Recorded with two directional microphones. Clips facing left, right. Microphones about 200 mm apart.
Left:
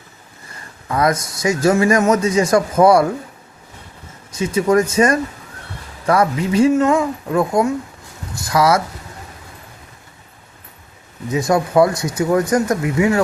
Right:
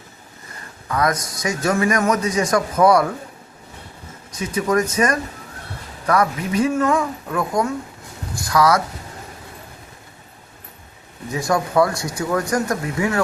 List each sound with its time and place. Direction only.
0.9 s speech: 25° left (ahead or behind)
4.4 s speech: 25° left (ahead or behind)
11.3 s speech: 20° left (ahead or behind)